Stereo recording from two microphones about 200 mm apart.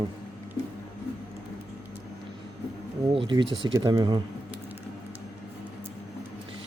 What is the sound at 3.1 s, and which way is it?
Speech, 25° right (ahead or behind).